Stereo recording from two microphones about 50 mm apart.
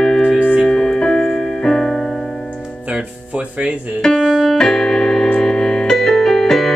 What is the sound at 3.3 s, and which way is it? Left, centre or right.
Music, right.